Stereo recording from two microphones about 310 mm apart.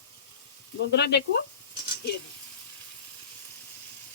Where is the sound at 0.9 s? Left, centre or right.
Left.